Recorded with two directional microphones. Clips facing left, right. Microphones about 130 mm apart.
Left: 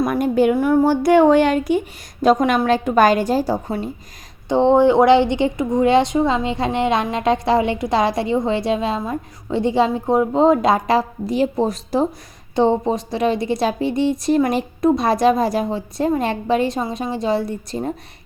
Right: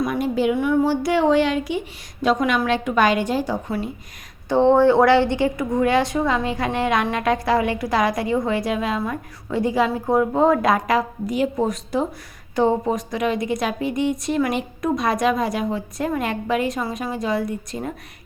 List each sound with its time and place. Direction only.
0.0 s a woman's voice: 50° left (ahead or behind)
4.4 s a woman's voice: 20° left (ahead or behind)